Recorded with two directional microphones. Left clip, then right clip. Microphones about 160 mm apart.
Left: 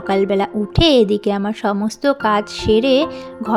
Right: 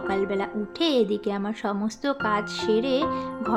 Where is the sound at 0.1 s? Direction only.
45° left (ahead or behind).